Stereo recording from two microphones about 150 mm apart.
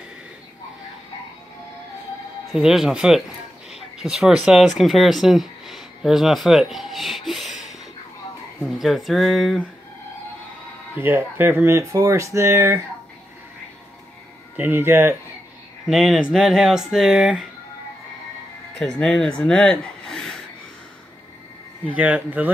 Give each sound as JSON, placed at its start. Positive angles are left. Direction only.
{"t": 2.5, "sound": "speech", "side_deg": -5}
{"t": 11.0, "sound": "speech", "side_deg": -15}
{"t": 14.6, "sound": "speech", "side_deg": -15}
{"t": 15.9, "sound": "speech", "side_deg": 0}
{"t": 18.8, "sound": "speech", "side_deg": 5}
{"t": 21.9, "sound": "speech", "side_deg": -10}